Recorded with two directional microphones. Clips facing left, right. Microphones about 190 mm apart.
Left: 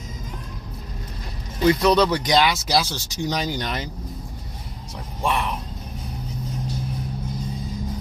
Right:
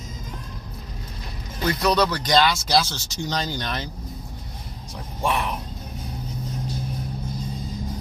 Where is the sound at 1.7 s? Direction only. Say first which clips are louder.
Left 4 dB; 20° left (ahead or behind).